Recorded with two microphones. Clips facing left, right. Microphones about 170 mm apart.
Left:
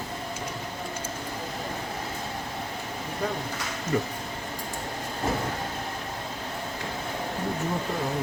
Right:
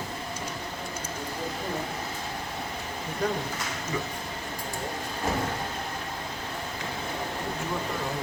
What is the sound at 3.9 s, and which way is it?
Speech, 60° left (ahead or behind).